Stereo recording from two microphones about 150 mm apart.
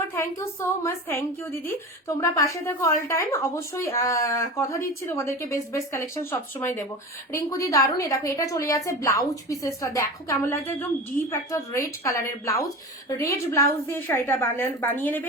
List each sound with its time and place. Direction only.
0.2 s a woman's voice: 15° left (ahead or behind)